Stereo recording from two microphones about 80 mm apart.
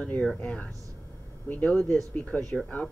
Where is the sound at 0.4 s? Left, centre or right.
Centre.